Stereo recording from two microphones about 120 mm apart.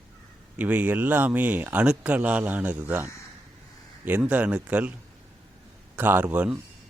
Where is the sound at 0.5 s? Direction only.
15° right (ahead or behind).